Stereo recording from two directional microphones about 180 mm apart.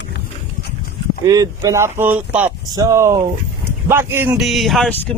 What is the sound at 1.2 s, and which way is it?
Speech, 20° right (ahead or behind).